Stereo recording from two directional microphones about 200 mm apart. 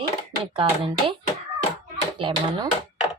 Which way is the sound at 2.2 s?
20° right (ahead or behind).